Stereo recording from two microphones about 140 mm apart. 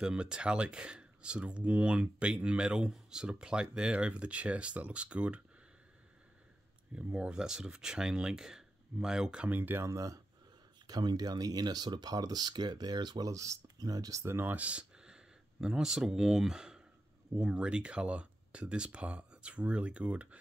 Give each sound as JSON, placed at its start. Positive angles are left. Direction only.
{"t": 0.0, "sound": "speech", "side_deg": -5}
{"t": 7.0, "sound": "speech", "side_deg": -10}